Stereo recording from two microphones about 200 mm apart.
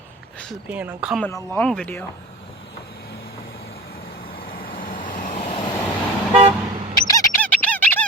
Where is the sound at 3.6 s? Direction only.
50° left (ahead or behind); by 5.7 s 25° left (ahead or behind).